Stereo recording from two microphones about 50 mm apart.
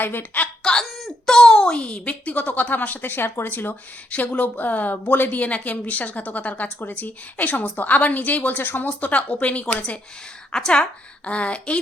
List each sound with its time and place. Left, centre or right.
0.0 s a woman's voice: left
0.6 s speech: centre
0.9 s speech: centre
1.3 s a woman's voice: centre; by 3.8 s left
4.1 s a woman's voice: left